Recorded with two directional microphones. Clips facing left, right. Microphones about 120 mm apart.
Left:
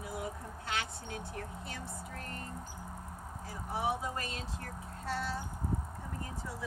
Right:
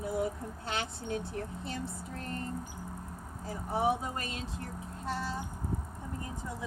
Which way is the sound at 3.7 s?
25° right (ahead or behind).